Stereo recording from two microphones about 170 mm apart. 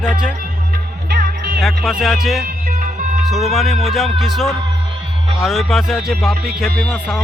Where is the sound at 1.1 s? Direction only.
60° right (ahead or behind).